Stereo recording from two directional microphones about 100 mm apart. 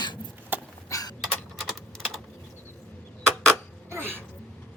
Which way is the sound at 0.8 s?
35° left (ahead or behind).